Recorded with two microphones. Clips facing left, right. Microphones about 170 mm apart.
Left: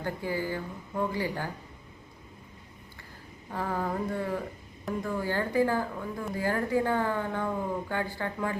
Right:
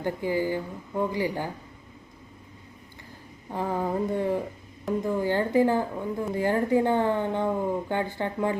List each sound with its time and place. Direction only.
0.0 s speech: 15° right (ahead or behind)
3.5 s a woman's voice: 20° right (ahead or behind)